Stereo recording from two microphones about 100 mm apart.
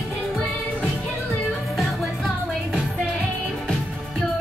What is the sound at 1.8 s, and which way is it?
Music, centre (ahead or behind).